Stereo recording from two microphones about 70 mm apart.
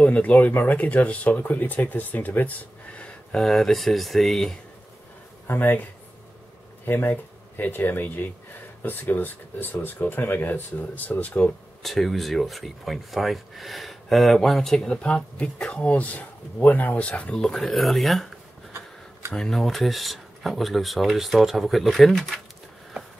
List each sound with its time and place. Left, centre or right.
0.0 s speech: left; by 4.6 s centre
5.5 s speech: left
6.9 s speech: left
11.8 s speech: centre
19.3 s speech: centre